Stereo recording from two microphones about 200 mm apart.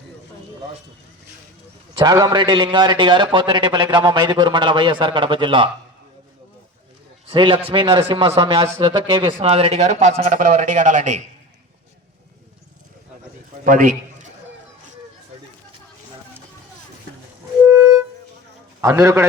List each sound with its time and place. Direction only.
2.0 s a man's voice: 20° right (ahead or behind)
7.3 s a man's voice: 25° right (ahead or behind)
13.7 s a man's voice: 40° right (ahead or behind)
17.7 s music: 15° right (ahead or behind)
18.8 s a man's voice: 15° right (ahead or behind)